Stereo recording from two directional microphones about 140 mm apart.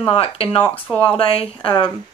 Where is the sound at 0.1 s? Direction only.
45° left (ahead or behind).